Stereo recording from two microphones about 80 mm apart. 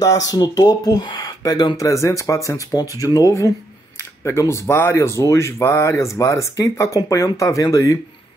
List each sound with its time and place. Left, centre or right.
0.0 s speech: left
1.8 s speech: left
4.2 s speech: left